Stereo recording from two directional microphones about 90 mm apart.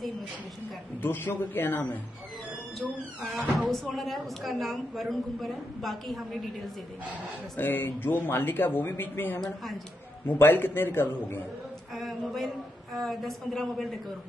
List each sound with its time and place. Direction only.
1.0 s speech: 25° left (ahead or behind)
2.8 s a woman's voice: centre (ahead or behind)
7.5 s speech: 20° left (ahead or behind)
11.9 s a woman's voice: centre (ahead or behind)